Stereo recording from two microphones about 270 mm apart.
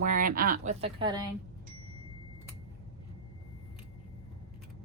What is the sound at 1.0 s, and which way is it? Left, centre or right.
Speech, centre.